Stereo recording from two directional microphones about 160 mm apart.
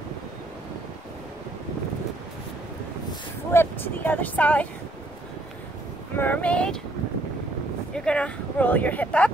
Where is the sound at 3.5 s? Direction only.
10° left (ahead or behind).